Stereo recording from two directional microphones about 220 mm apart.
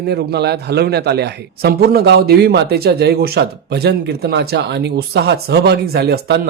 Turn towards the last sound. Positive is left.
turn(degrees=-45)  # may be behind; listen again after turning